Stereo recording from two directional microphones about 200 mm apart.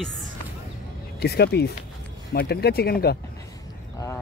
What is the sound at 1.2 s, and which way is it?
Speech, 55° left (ahead or behind).